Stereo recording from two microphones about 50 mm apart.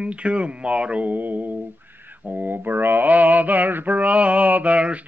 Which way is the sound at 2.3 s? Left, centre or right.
Right.